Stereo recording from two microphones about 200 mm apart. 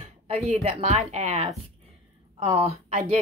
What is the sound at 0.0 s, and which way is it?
Speech, 30° right (ahead or behind).